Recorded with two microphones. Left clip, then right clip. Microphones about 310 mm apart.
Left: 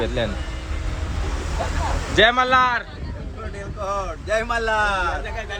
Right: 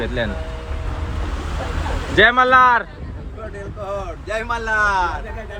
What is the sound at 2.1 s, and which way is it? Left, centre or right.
A man's voice, centre.